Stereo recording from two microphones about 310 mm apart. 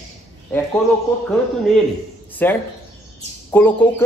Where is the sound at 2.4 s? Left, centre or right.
Centre.